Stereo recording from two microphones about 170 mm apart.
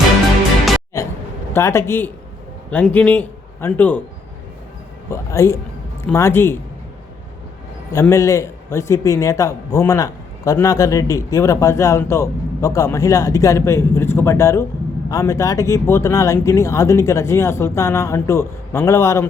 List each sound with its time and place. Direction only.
1.5 s a man's voice: 15° left (ahead or behind)
5.1 s a man's voice: 15° left (ahead or behind)
8.0 s a man's voice: 15° left (ahead or behind)